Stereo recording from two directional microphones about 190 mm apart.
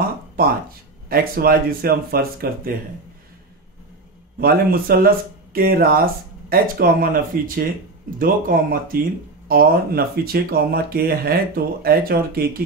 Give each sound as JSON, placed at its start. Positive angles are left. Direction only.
{"t": 1.0, "sound": "speech", "side_deg": -50}
{"t": 4.4, "sound": "speech", "side_deg": -50}